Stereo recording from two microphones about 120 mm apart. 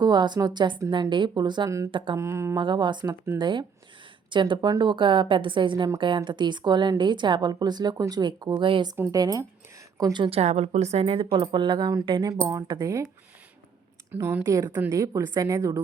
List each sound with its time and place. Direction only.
0.0 s a woman's voice: 35° right (ahead or behind)
2.1 s a woman's voice: 25° right (ahead or behind)
2.6 s a woman's voice: 40° right (ahead or behind)
9.1 s a woman's voice: 30° right (ahead or behind)
14.1 s a woman's voice: 20° right (ahead or behind)